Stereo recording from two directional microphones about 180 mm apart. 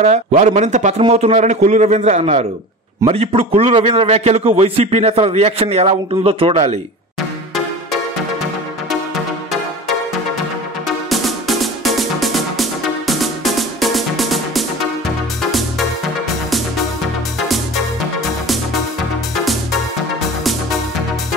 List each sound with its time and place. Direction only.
0.0 s a man's voice: 40° right (ahead or behind)
11.1 s music: centre (ahead or behind)